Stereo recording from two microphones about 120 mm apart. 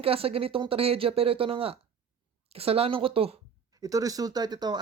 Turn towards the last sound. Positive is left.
turn(degrees=-35)  # may be behind; listen again after turning